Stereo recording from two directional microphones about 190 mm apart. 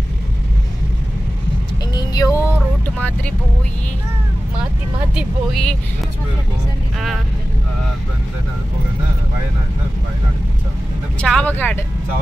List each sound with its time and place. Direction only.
2.0 s a sound: 20° left (ahead or behind)
5.1 s speech: centre (ahead or behind)
11.1 s speech: 5° left (ahead or behind)